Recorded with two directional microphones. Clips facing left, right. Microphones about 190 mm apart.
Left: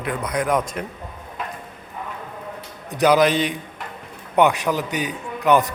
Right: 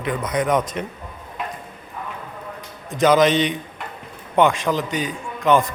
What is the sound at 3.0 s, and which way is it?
A man's voice, 10° left (ahead or behind).